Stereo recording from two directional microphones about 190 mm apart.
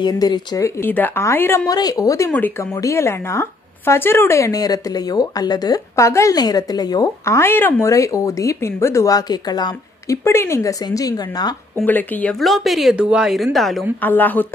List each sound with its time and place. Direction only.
0.0 s a woman's voice: 20° left (ahead or behind)
11.8 s a woman's voice: 10° left (ahead or behind)